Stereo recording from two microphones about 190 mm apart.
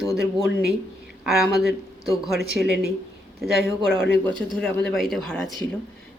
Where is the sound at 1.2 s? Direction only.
Centre (ahead or behind).